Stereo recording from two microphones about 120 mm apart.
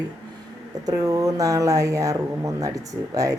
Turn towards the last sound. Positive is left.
turn(degrees=-30)  # may be behind; listen again after turning